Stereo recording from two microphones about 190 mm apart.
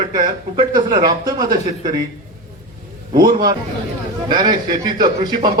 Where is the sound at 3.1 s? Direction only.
20° right (ahead or behind).